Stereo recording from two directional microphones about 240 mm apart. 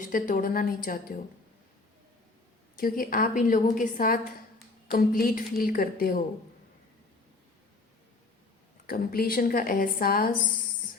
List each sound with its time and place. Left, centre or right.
0.0 s a woman's voice: left
2.7 s a woman's voice: left
8.9 s a woman's voice: left